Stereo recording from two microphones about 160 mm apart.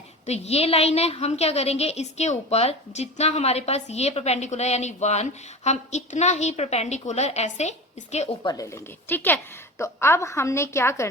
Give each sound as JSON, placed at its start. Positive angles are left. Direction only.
{"t": 0.3, "sound": "a woman's voice", "side_deg": 40}
{"t": 8.4, "sound": "a woman's voice", "side_deg": 20}